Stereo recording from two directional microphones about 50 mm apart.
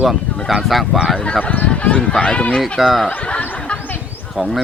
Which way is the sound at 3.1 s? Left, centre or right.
Left.